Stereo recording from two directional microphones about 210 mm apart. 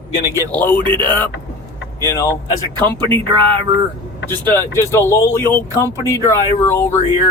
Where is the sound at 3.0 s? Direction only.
25° right (ahead or behind).